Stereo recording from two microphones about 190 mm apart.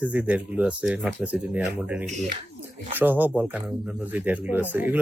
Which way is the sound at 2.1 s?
40° right (ahead or behind).